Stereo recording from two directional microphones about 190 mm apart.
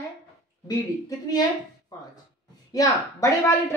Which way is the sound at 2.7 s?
15° left (ahead or behind).